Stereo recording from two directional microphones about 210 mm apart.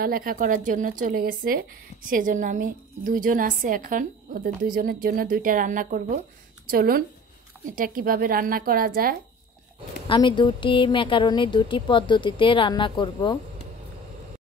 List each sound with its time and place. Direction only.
0.0 s speech: 40° right (ahead or behind)
10.0 s a woman's voice: 20° left (ahead or behind)